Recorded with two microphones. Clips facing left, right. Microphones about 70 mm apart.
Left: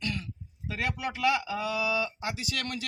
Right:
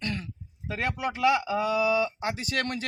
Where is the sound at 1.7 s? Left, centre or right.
Right.